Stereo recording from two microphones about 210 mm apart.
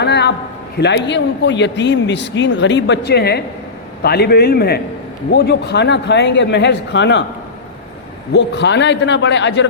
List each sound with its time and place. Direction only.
0.0 s a sound: 55° left (ahead or behind)
0.8 s a man's voice: 55° left (ahead or behind)
8.3 s a man's voice: 55° left (ahead or behind)